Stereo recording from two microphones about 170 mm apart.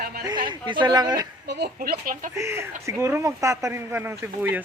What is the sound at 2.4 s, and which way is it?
Speech, 15° right (ahead or behind).